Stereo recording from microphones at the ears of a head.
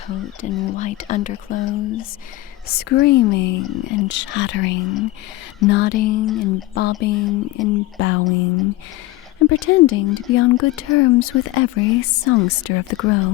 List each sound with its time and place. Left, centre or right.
0.1 s speech: left